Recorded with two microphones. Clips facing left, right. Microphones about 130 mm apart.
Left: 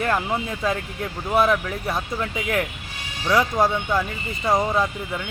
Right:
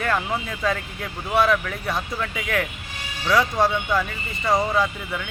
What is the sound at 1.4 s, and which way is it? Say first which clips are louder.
Speech: even; 25° left (ahead or behind).